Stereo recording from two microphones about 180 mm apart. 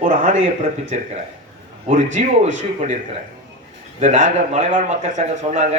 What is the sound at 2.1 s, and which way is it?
Speech, 40° right (ahead or behind).